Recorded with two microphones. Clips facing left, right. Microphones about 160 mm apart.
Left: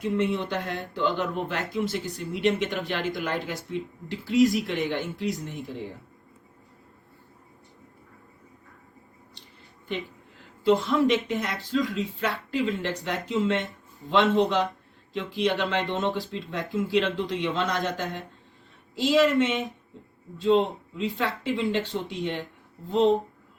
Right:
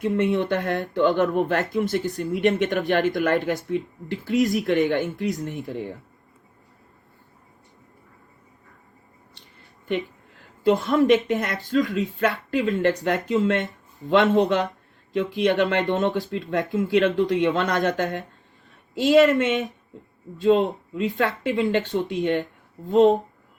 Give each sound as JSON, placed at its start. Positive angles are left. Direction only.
{"t": 0.0, "sound": "speech", "side_deg": -55}
{"t": 10.6, "sound": "speech", "side_deg": -45}